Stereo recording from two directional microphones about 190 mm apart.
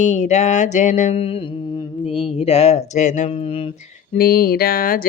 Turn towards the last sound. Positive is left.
turn(degrees=50)  # may be behind; listen again after turning